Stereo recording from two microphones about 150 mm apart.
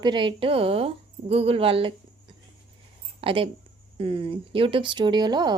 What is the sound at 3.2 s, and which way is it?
A woman's voice, 35° right (ahead or behind).